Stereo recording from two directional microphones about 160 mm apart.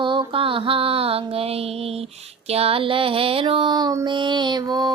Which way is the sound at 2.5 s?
40° right (ahead or behind).